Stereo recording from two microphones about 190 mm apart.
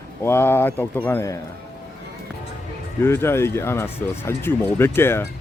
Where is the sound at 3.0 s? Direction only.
15° left (ahead or behind).